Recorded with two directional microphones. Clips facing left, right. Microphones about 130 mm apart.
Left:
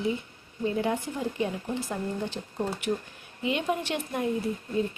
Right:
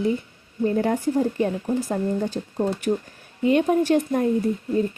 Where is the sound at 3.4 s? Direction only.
45° right (ahead or behind).